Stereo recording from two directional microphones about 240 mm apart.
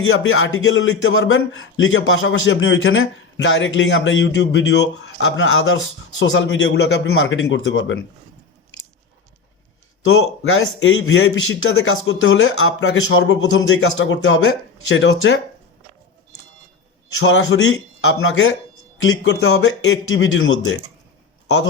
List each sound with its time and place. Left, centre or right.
0.0 s a man's voice: left
10.1 s a man's voice: left
17.2 s a man's voice: left